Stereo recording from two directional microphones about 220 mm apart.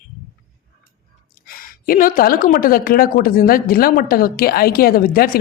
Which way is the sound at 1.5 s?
40° left (ahead or behind).